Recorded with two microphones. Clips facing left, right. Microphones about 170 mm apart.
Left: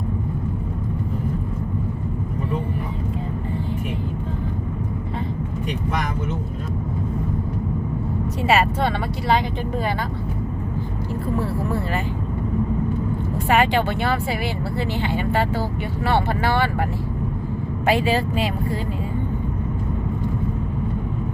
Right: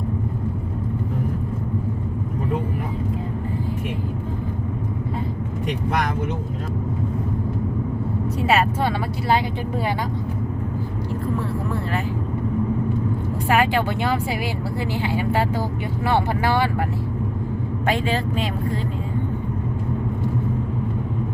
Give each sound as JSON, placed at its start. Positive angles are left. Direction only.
{"t": 8.4, "sound": "speech", "side_deg": 0}
{"t": 13.5, "sound": "speech", "side_deg": -5}
{"t": 17.8, "sound": "speech", "side_deg": 5}